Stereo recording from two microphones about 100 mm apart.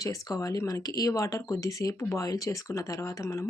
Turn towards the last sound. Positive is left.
turn(degrees=30)  # may be behind; listen again after turning